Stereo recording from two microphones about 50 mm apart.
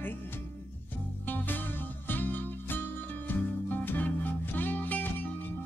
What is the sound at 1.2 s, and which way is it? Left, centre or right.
Music, left.